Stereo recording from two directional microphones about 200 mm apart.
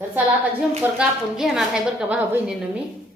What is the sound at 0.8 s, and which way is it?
A woman's voice, 5° right (ahead or behind).